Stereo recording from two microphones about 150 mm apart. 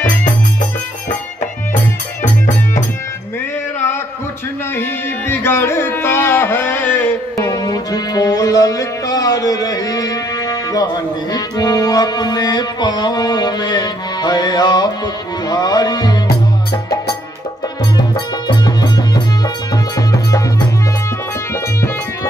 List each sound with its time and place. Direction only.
5.3 s carnatic music: 15° left (ahead or behind)
11.3 s music: 25° left (ahead or behind)
18.1 s music: 25° left (ahead or behind)